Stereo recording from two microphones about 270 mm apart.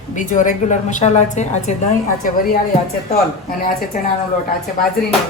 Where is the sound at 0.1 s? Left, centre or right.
Left.